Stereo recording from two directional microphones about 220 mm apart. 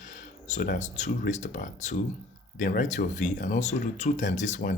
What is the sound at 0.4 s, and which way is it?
Speech, 35° left (ahead or behind).